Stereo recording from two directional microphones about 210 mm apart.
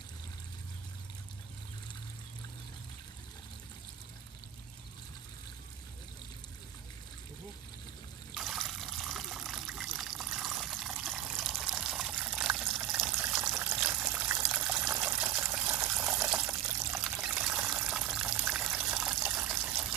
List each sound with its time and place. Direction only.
8.4 s water: centre (ahead or behind)
13.6 s trickle: 5° right (ahead or behind)
15.7 s water: 15° right (ahead or behind)
16.3 s pour: 5° right (ahead or behind)